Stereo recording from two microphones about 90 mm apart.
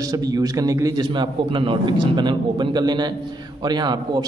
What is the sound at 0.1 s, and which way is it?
Speech, 45° right (ahead or behind).